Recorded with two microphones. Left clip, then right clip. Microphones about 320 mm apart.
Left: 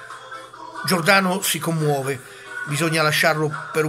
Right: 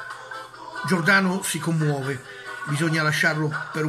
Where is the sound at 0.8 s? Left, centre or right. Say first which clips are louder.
Left 3 dB; centre.